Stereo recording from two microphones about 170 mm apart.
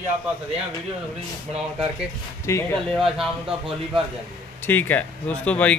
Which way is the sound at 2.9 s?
Centre (ahead or behind).